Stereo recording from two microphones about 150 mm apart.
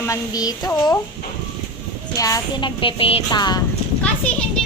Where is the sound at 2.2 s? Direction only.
20° left (ahead or behind).